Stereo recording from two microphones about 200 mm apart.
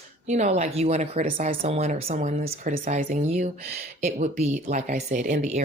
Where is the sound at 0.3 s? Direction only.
35° right (ahead or behind).